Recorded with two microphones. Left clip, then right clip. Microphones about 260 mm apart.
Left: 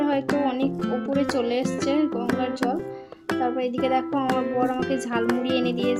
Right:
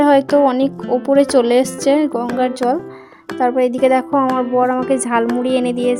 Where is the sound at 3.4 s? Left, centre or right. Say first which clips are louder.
Right 12 dB; right.